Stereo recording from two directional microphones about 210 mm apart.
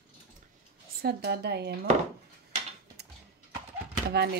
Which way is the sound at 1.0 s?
50° right (ahead or behind).